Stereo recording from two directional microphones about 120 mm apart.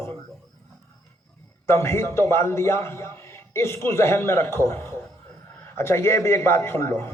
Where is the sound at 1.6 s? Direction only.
20° left (ahead or behind).